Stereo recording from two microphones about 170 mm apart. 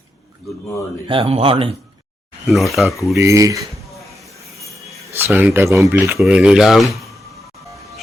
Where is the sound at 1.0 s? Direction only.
35° right (ahead or behind).